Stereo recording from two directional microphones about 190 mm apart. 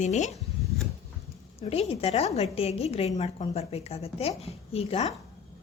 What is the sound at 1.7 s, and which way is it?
A woman's voice, 30° left (ahead or behind).